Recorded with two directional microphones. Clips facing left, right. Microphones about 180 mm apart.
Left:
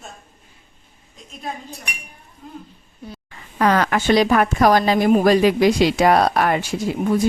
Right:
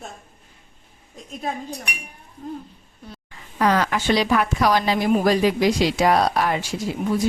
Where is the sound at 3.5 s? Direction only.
60° left (ahead or behind).